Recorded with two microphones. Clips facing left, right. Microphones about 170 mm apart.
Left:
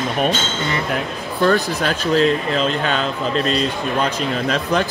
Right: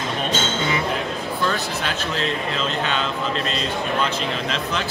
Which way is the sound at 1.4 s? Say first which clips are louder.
Left 10 dB; 45° left (ahead or behind).